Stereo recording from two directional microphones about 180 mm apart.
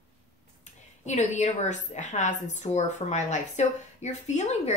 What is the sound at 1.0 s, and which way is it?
A woman's voice, 40° left (ahead or behind).